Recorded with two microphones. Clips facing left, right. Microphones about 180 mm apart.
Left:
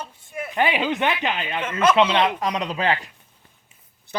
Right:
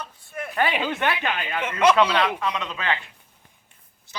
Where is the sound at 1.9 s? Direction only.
25° left (ahead or behind).